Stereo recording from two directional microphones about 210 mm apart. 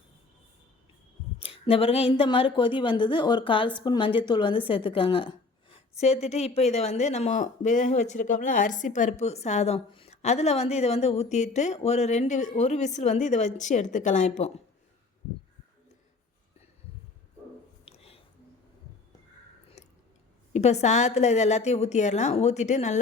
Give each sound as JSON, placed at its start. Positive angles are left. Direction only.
{"t": 1.4, "sound": "a woman's voice", "side_deg": 25}
{"t": 17.8, "sound": "whispering", "side_deg": 30}
{"t": 19.8, "sound": "chewing", "side_deg": 30}
{"t": 20.5, "sound": "a woman's voice", "side_deg": 30}